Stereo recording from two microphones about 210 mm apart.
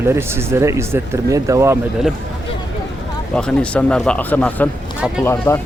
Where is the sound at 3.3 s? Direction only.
5° left (ahead or behind).